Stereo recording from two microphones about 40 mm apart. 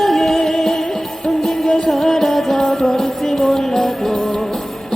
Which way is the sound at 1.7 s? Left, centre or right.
Centre.